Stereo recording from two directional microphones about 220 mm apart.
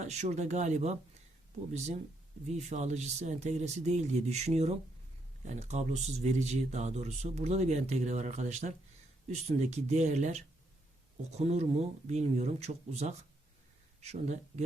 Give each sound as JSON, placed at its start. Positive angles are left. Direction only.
{"t": 0.0, "sound": "speech", "side_deg": -30}
{"t": 2.5, "sound": "speech", "side_deg": -30}